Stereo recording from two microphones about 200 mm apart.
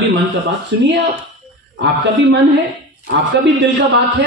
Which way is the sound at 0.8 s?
60° right (ahead or behind).